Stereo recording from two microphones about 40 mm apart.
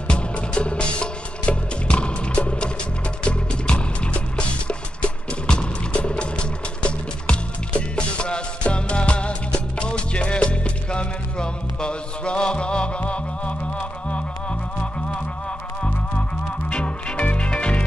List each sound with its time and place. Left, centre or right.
0.1 s music: left